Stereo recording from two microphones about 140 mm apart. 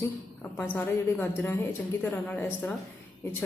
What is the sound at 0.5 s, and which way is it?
A woman's voice, 10° left (ahead or behind).